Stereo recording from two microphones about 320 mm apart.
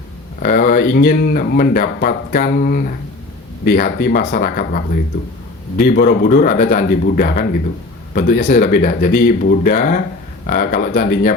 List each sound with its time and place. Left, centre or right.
0.4 s speech: left